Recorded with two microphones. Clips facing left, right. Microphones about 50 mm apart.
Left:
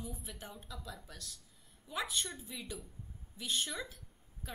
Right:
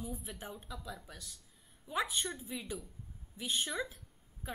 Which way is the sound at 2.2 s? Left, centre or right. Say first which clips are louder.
Right 4 dB; centre.